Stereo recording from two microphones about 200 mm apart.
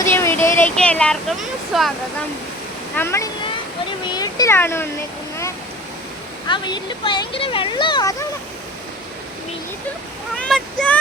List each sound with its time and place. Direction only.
0.0 s a sound: 10° left (ahead or behind)
1.7 s speech: centre (ahead or behind)
2.9 s speech: 10° left (ahead or behind)
6.5 s speech: 20° left (ahead or behind)
10.3 s speech: 5° left (ahead or behind)